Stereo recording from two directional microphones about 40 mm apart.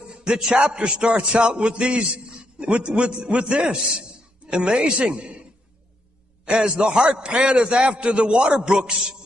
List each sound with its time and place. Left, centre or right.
0.1 s a man's voice: right
6.4 s a man's voice: right